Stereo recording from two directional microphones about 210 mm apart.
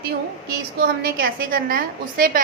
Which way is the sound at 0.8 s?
45° right (ahead or behind).